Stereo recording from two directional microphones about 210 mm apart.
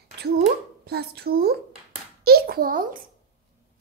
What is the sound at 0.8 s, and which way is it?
A child's voice, 50° right (ahead or behind).